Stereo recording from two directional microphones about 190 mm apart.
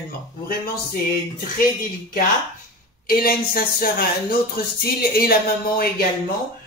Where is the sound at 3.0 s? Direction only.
50° left (ahead or behind).